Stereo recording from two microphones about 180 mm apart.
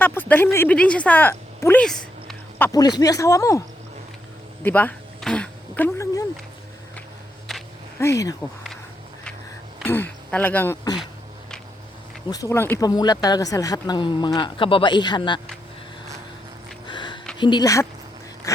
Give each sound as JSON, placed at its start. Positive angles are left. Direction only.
{"t": 0.0, "sound": "speech", "side_deg": 10}
{"t": 2.6, "sound": "speech", "side_deg": 20}
{"t": 4.6, "sound": "a sound", "side_deg": 10}
{"t": 7.9, "sound": "speech", "side_deg": 15}
{"t": 9.8, "sound": "speech", "side_deg": 10}
{"t": 12.3, "sound": "speech", "side_deg": 15}
{"t": 16.8, "sound": "a sound", "side_deg": 25}
{"t": 17.3, "sound": "speech", "side_deg": 25}
{"t": 18.5, "sound": "a sound", "side_deg": 20}